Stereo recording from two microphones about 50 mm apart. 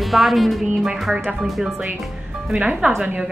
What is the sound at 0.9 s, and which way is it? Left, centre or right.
Speech, centre.